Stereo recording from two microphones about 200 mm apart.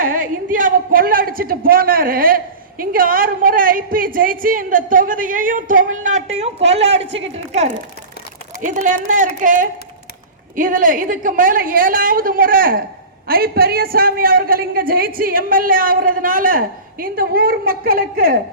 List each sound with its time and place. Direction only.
0.0 s a man's voice: 45° right (ahead or behind)
8.6 s a man's voice: 40° right (ahead or behind)